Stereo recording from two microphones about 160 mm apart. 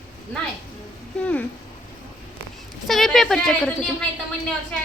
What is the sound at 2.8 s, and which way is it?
A woman's voice, centre (ahead or behind).